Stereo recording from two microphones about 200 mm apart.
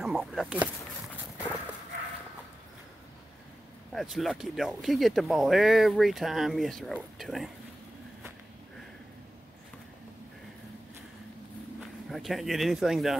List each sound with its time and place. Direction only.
0.0 s speech: centre (ahead or behind)
3.9 s speech: centre (ahead or behind)
12.1 s speech: centre (ahead or behind)